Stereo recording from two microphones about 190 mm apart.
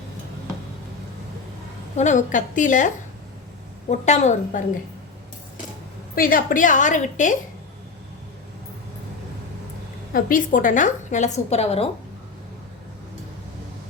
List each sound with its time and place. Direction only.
2.0 s a woman's voice: 40° left (ahead or behind)
6.1 s a woman's voice: 50° left (ahead or behind)
10.1 s a woman's voice: 50° left (ahead or behind)